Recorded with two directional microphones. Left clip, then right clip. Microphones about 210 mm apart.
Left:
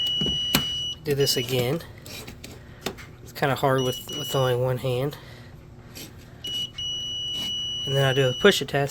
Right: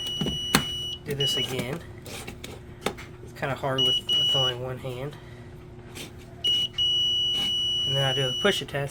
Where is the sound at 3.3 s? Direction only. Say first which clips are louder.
Left 4 dB; 55° left (ahead or behind).